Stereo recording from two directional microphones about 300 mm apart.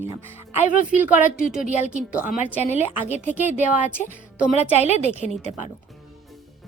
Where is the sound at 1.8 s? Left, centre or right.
Centre.